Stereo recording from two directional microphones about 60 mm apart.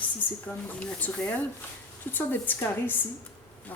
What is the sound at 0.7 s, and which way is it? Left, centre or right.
Speech, left.